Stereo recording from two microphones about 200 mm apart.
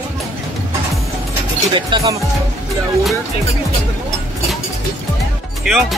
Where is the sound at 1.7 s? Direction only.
25° right (ahead or behind).